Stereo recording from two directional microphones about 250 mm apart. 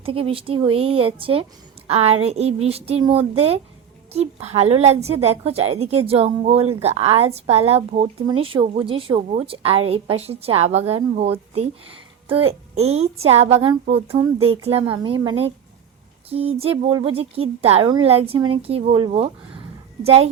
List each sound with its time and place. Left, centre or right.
0.0 s speech: right
12.7 s speech: right